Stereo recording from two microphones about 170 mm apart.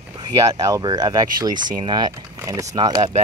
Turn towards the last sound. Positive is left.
turn(degrees=-25)  # may be behind; listen again after turning